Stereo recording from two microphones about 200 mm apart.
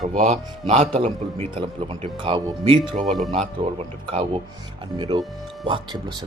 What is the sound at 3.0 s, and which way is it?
Speech, centre (ahead or behind).